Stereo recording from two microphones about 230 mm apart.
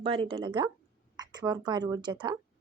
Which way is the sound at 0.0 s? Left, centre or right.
Right.